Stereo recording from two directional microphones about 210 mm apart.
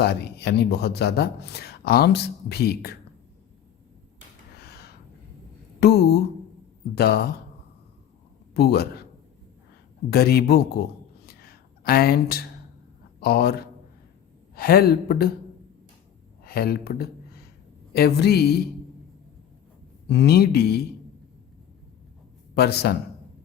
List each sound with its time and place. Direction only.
0.0 s speech: 50° left (ahead or behind)
4.5 s a sound: 50° left (ahead or behind)
5.8 s speech: 50° left (ahead or behind)
8.5 s speech: 50° left (ahead or behind)
10.1 s speech: 50° left (ahead or behind)
11.3 s a sound: 45° left (ahead or behind)
13.1 s a man's voice: 50° left (ahead or behind)
16.4 s speech: 45° left (ahead or behind)
20.1 s speech: 50° left (ahead or behind)
22.5 s speech: 50° left (ahead or behind)